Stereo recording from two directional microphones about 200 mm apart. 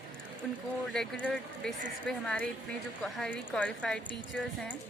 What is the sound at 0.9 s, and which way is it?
Speech, 5° left (ahead or behind).